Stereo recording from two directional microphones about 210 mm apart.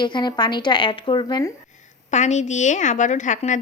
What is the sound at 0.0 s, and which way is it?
Speech, 20° left (ahead or behind).